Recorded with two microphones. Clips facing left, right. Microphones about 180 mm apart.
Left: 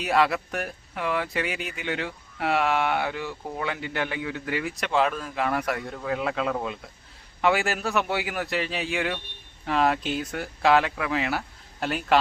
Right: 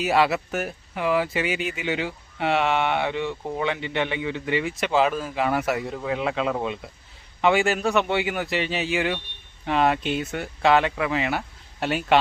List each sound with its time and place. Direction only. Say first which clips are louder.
0.0 s speech: right 2 dB; 5° right (ahead or behind)